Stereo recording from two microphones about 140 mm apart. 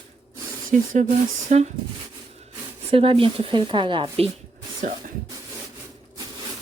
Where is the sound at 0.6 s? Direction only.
75° right (ahead or behind).